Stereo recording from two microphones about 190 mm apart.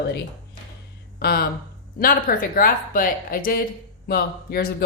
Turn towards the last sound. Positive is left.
turn(degrees=50)  # may be behind; listen again after turning